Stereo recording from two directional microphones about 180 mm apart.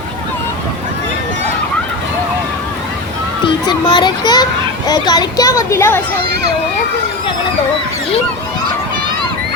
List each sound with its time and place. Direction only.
3.4 s a child's voice: 25° left (ahead or behind)